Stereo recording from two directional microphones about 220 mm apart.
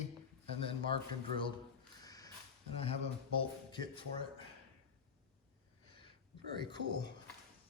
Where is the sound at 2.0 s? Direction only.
15° left (ahead or behind).